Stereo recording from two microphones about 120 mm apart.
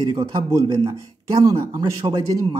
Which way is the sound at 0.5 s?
25° right (ahead or behind).